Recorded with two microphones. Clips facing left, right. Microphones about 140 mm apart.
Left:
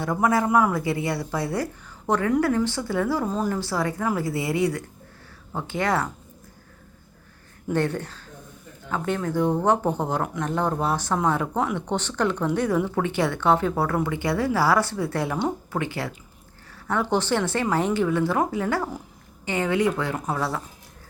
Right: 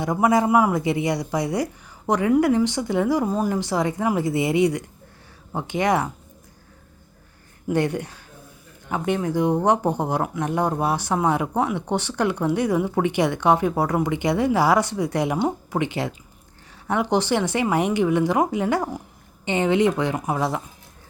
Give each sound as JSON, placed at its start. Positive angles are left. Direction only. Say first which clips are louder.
{"t": 0.0, "sound": "speech", "louder": "right 3 dB", "side_deg": -15}
{"t": 7.7, "sound": "a woman's voice", "louder": "right 2 dB", "side_deg": -15}